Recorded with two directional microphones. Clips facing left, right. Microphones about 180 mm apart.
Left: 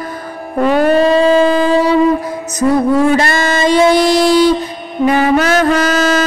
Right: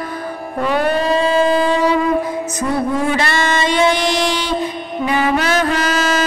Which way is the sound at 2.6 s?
60° left (ahead or behind).